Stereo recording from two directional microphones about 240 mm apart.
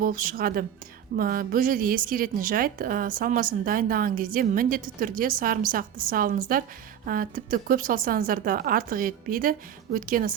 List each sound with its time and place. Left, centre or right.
0.0 s a woman's voice: right